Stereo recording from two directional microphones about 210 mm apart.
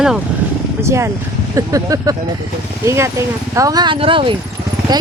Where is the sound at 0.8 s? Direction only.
15° right (ahead or behind).